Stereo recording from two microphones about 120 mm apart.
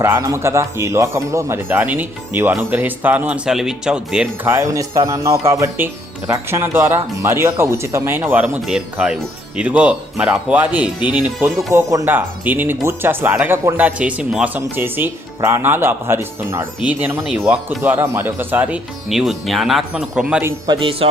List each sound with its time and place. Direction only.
0.0 s speech: 25° right (ahead or behind); by 4.3 s 5° right (ahead or behind)
4.4 s speech: 25° right (ahead or behind)
19.0 s speech: centre (ahead or behind)
20.7 s speech: 45° right (ahead or behind)